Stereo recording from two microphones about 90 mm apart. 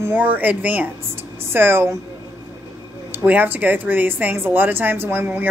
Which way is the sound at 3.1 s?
20° right (ahead or behind).